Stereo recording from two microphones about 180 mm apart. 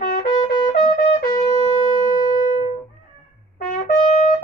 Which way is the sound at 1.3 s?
20° left (ahead or behind).